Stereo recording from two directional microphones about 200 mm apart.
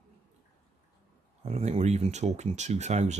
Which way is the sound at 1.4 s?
30° right (ahead or behind).